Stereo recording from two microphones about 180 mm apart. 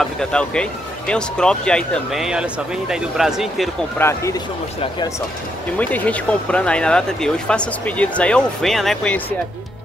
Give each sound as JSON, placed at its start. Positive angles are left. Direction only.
{"t": 0.0, "sound": "speech", "side_deg": 5}
{"t": 4.0, "sound": "speech", "side_deg": 15}
{"t": 5.8, "sound": "speech", "side_deg": 10}